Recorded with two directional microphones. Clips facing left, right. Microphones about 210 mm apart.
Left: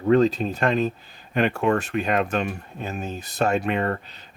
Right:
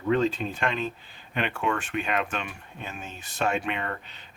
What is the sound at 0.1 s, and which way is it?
Speech, 40° left (ahead or behind).